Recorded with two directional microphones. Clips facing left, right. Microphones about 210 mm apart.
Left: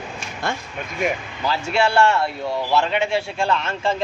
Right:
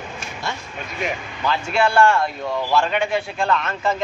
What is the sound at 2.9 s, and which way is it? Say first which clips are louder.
A man's voice: even; 25° left (ahead or behind).